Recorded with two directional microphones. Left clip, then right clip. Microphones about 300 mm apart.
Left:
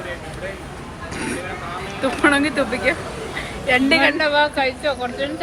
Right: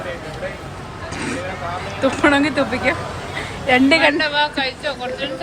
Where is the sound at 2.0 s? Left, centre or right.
Centre.